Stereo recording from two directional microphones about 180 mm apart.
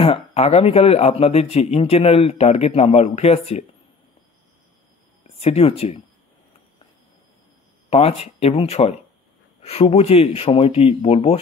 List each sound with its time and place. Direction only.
0.0 s speech: 35° left (ahead or behind)
5.4 s speech: 35° left (ahead or behind)
7.9 s speech: 35° left (ahead or behind)